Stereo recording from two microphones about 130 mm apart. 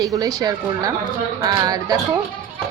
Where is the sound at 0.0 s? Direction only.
25° right (ahead or behind).